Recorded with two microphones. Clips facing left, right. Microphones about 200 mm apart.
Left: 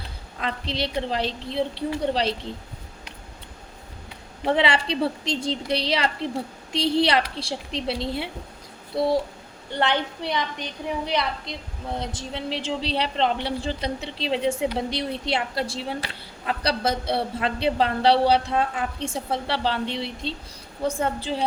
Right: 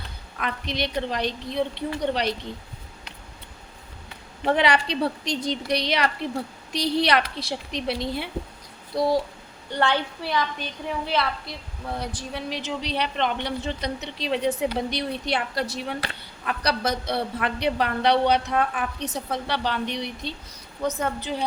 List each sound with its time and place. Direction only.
0.3 s a woman's voice: 30° left (ahead or behind)
4.4 s a woman's voice: 25° left (ahead or behind)
9.7 s a woman's voice: 20° left (ahead or behind)